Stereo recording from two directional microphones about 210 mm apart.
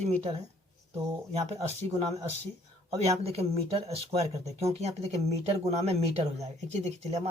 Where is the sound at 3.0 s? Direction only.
30° right (ahead or behind).